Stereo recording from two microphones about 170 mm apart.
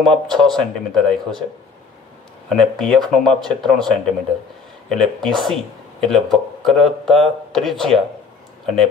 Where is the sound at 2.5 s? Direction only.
Centre (ahead or behind).